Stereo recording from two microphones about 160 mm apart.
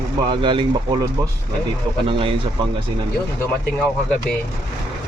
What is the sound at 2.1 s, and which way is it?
Speech, 35° right (ahead or behind).